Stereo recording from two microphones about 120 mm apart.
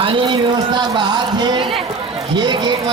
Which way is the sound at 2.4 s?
40° right (ahead or behind).